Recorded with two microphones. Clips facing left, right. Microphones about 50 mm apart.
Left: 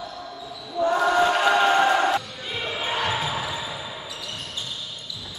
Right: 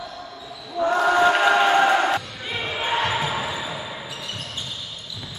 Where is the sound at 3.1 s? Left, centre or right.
Centre.